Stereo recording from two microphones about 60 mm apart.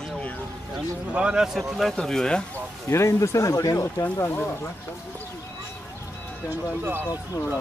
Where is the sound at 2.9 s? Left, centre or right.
Left.